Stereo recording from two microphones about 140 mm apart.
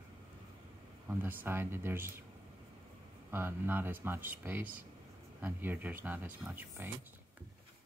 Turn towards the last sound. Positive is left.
turn(degrees=-15)  # may be behind; listen again after turning